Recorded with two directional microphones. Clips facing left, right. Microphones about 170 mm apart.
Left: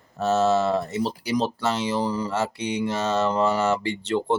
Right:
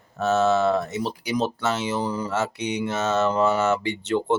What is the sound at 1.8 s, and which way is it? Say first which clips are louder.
Speech: left 1 dB; 30° left (ahead or behind).